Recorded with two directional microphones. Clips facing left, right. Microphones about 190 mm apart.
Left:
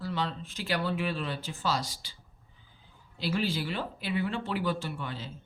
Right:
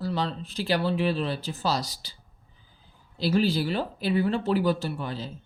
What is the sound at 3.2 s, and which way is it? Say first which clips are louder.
Speech: right 7 dB; 35° right (ahead or behind).